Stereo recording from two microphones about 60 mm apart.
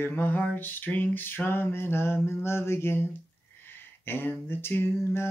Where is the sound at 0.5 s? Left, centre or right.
Left.